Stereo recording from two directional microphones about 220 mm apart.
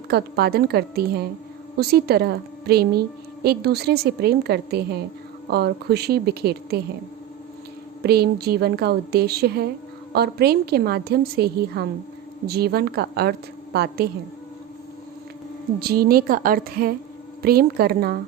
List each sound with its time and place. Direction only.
0.1 s a woman's voice: 45° right (ahead or behind)
8.0 s a woman's voice: 45° right (ahead or behind)
15.8 s a woman's voice: 45° right (ahead or behind)